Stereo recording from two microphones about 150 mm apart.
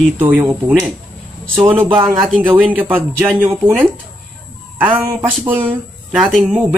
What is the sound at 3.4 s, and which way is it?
Speech, 15° right (ahead or behind).